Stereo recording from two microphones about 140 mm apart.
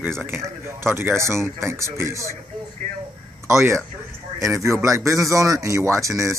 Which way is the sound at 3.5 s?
20° right (ahead or behind).